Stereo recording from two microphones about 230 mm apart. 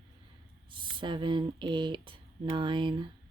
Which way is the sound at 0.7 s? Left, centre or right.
Right.